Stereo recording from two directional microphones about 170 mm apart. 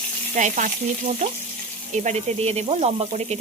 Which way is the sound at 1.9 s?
40° right (ahead or behind).